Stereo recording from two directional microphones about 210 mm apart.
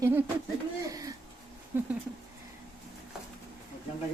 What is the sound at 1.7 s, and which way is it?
Speech, 10° right (ahead or behind).